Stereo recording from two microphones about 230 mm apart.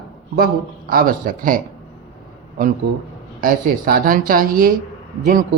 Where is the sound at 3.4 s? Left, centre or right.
Right.